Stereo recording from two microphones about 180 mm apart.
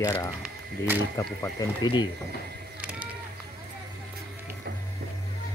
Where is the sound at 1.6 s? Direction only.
25° left (ahead or behind).